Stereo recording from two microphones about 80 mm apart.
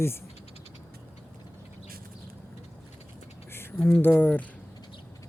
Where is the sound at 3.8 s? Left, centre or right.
Left.